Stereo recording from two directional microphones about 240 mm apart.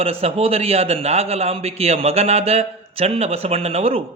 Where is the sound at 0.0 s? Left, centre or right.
Right.